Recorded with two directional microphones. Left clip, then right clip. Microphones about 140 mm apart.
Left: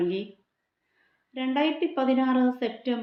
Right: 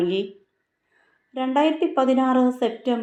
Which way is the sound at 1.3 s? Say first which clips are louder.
Right 6 dB; 15° right (ahead or behind).